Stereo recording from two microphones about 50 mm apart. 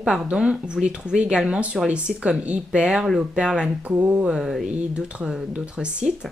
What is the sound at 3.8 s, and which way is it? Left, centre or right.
Speech, right.